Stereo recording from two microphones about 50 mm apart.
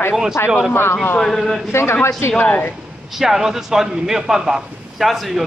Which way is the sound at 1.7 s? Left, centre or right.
Left.